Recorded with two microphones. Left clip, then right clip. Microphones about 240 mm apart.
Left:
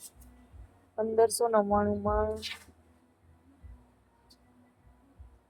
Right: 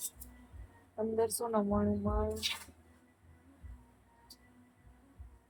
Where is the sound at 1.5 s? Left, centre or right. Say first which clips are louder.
Left 7 dB; left.